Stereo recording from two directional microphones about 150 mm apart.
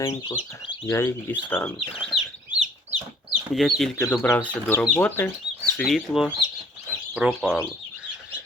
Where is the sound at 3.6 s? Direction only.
Centre (ahead or behind).